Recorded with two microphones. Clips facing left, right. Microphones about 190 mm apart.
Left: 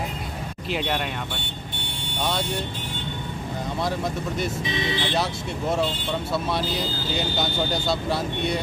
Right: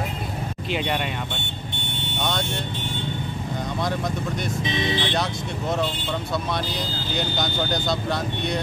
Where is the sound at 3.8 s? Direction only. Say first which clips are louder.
Even; 5° left (ahead or behind).